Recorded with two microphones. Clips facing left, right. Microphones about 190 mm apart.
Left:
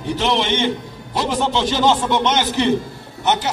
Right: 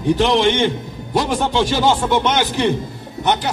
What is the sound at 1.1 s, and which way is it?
A man's voice, 10° right (ahead or behind).